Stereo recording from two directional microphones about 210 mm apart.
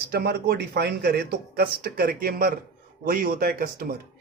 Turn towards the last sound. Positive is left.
turn(degrees=-45)  # may be behind; listen again after turning